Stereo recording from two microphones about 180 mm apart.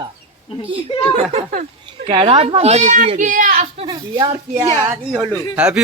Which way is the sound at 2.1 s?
30° right (ahead or behind).